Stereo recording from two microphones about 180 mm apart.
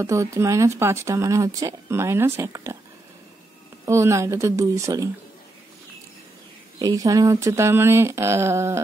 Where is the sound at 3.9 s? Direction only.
15° right (ahead or behind).